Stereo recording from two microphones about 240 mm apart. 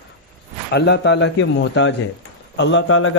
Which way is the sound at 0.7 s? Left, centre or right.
Left.